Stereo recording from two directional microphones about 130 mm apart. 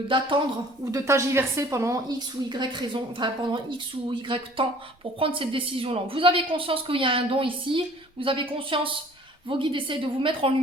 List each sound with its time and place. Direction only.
0.9 s a woman's voice: 25° right (ahead or behind); by 10.5 s 40° right (ahead or behind)